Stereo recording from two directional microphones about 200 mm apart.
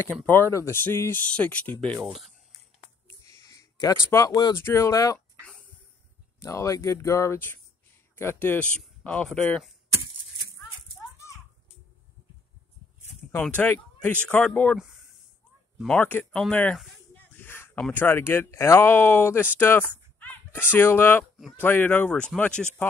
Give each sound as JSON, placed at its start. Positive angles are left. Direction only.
{"t": 0.3, "sound": "speech", "side_deg": 10}
{"t": 3.1, "sound": "speech", "side_deg": 15}
{"t": 6.4, "sound": "speech", "side_deg": 15}
{"t": 11.0, "sound": "children playing", "side_deg": 15}
{"t": 13.4, "sound": "speech", "side_deg": 5}
{"t": 14.8, "sound": "a sound", "side_deg": -5}
{"t": 15.8, "sound": "speech", "side_deg": 5}
{"t": 21.4, "sound": "speech", "side_deg": 0}